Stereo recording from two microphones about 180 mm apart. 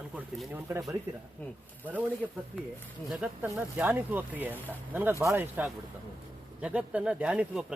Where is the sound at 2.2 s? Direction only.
5° right (ahead or behind).